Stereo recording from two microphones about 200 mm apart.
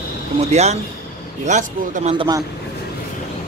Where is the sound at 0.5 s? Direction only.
35° right (ahead or behind).